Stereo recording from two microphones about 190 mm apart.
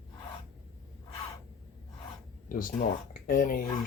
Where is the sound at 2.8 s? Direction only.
45° left (ahead or behind).